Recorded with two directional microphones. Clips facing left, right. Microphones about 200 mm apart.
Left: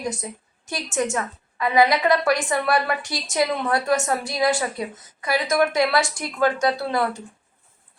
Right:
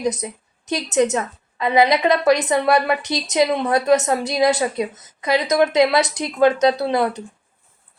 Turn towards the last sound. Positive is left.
turn(degrees=-20)  # may be behind; listen again after turning